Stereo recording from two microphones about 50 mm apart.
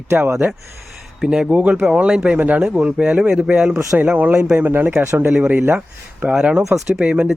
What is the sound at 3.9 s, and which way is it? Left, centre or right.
Speech, right.